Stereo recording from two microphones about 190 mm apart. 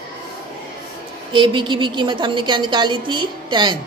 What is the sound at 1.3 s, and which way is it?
Speech, 25° right (ahead or behind).